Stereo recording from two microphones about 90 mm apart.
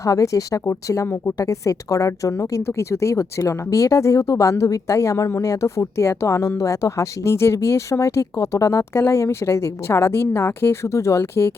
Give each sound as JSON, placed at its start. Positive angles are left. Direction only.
{"t": 0.0, "sound": "a woman's voice", "side_deg": 40}